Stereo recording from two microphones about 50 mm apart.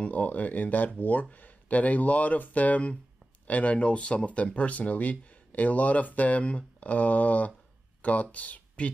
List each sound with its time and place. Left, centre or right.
0.0 s speech: left